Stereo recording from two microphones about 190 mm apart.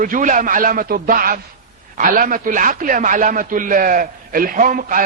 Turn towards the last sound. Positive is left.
turn(degrees=-45)  # may be behind; listen again after turning